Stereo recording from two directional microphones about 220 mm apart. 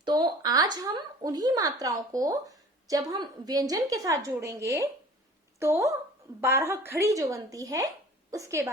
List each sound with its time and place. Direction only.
0.0 s a woman's voice: 20° right (ahead or behind)